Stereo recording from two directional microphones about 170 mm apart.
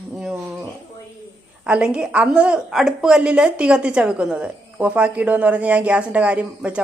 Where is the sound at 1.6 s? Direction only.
5° right (ahead or behind).